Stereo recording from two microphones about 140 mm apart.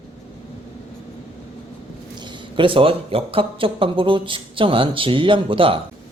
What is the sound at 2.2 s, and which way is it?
Speech, 35° right (ahead or behind).